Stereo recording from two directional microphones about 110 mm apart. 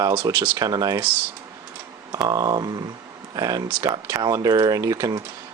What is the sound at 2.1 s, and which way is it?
Speech, 30° right (ahead or behind).